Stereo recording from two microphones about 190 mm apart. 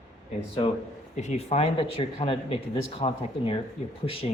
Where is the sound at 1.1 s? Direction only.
35° left (ahead or behind).